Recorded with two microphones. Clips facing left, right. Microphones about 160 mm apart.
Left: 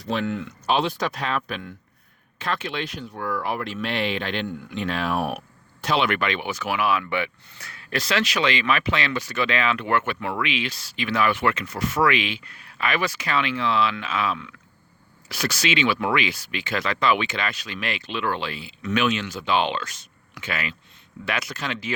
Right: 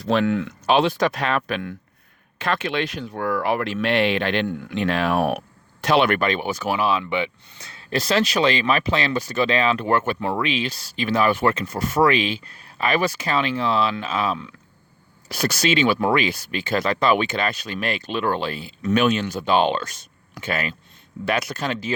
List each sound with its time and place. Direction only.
0.0 s speech: 90° right; by 5.4 s 70° right (ahead or behind)
6.0 s speech: 45° right (ahead or behind)